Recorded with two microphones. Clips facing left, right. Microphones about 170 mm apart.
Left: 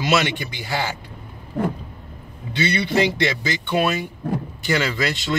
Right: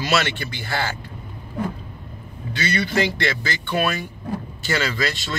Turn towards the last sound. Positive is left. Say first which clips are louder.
# left 2 dB
turn(degrees=20)  # may be behind; listen again after turning